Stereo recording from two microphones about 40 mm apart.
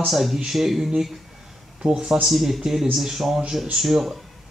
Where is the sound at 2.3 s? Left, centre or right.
Centre.